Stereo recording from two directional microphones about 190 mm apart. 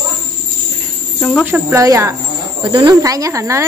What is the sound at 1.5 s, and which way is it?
Speech, 15° right (ahead or behind).